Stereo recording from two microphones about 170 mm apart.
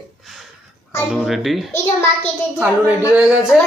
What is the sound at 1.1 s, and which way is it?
A woman's voice, centre (ahead or behind).